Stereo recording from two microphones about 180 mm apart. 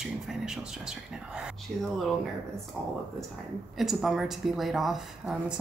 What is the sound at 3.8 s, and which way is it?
Speech, centre (ahead or behind).